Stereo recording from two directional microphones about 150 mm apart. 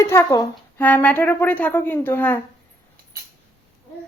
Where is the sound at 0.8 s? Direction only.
10° left (ahead or behind).